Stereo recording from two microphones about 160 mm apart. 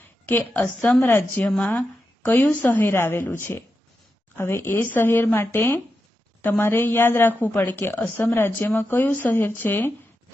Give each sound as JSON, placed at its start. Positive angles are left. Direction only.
{"t": 0.3, "sound": "a woman's voice", "side_deg": 10}